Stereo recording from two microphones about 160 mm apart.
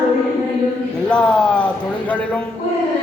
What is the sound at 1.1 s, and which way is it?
Speech, 5° left (ahead or behind).